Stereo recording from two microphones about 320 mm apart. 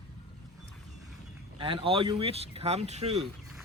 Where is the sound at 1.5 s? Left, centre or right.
Centre.